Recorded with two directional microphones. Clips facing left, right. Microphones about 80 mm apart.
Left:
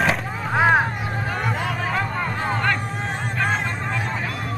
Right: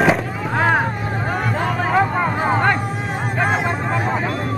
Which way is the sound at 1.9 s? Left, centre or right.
Centre.